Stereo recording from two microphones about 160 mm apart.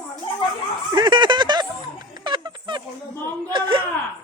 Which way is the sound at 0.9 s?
30° right (ahead or behind).